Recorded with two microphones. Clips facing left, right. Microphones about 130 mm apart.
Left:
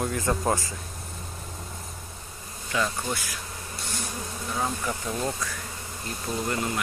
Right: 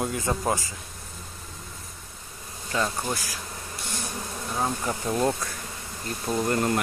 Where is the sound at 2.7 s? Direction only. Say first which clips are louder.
Even; 30° right (ahead or behind).